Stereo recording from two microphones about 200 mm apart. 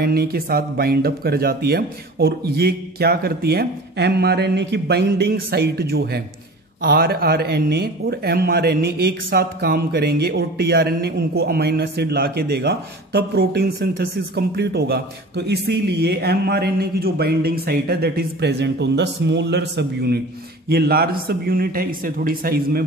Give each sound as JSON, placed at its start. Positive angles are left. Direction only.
{"t": 0.0, "sound": "speech", "side_deg": -50}